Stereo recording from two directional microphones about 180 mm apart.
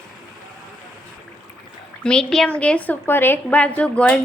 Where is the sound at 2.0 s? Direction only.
5° left (ahead or behind).